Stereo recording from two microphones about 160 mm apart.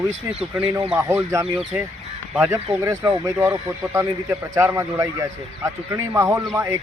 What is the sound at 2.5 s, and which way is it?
Speech, 15° right (ahead or behind).